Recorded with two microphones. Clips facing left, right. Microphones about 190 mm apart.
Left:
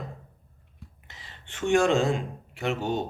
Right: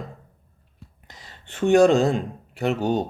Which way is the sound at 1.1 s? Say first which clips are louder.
Right 5 dB; 40° right (ahead or behind).